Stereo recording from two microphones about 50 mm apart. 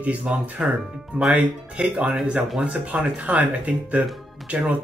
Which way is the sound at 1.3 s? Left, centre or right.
Right.